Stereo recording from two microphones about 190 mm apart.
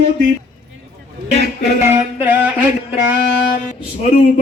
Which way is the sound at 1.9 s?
10° right (ahead or behind).